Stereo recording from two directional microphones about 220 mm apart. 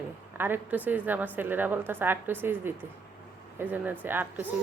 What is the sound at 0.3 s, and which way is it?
A woman's voice, 10° right (ahead or behind).